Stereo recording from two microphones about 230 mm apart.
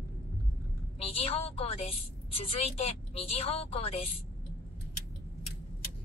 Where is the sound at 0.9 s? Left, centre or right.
Left.